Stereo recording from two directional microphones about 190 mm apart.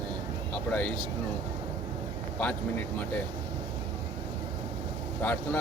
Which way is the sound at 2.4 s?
5° left (ahead or behind).